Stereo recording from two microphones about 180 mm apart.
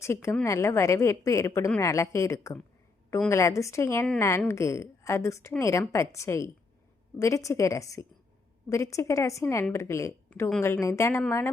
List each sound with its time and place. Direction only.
0.0 s a woman's voice: 15° left (ahead or behind)